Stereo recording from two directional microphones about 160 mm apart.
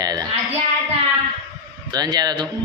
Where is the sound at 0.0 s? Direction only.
25° right (ahead or behind).